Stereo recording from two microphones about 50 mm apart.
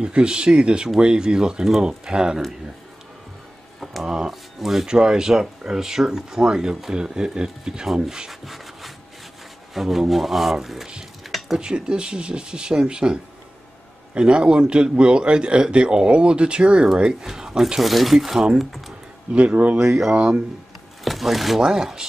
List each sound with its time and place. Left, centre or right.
0.0 s a man's voice: centre
4.0 s speech: centre
4.3 s speech: centre
4.8 s speech: centre
9.8 s speech: centre
11.5 s a man's voice: centre
19.3 s a man's voice: right
19.8 s speech: centre
20.2 s a man's voice: right
21.0 s speech: centre
21.6 s speech: centre